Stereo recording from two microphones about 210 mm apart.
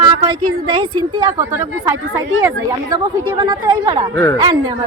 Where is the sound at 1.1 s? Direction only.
15° right (ahead or behind).